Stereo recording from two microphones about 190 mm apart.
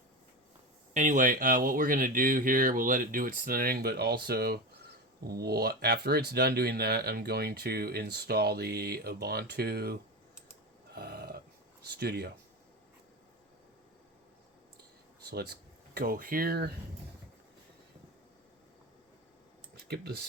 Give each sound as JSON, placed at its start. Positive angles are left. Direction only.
{"t": 0.9, "sound": "speech", "side_deg": -40}
{"t": 10.9, "sound": "burping", "side_deg": -55}
{"t": 11.9, "sound": "speech", "side_deg": -60}
{"t": 15.3, "sound": "speech", "side_deg": -55}
{"t": 19.9, "sound": "speech", "side_deg": -55}